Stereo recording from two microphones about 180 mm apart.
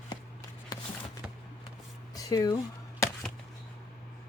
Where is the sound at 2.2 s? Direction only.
20° left (ahead or behind).